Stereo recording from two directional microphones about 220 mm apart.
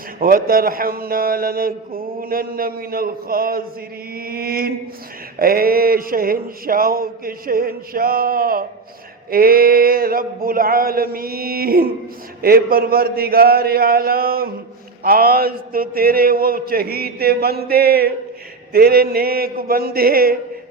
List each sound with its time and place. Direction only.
0.2 s a man's voice: 40° right (ahead or behind)